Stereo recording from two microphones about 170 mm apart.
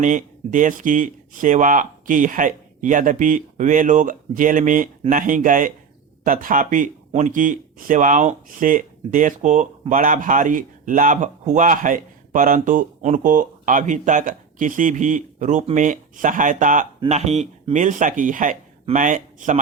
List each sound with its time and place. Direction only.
0.0 s speech: 50° right (ahead or behind)